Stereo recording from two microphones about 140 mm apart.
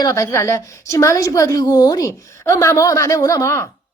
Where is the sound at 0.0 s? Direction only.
20° left (ahead or behind).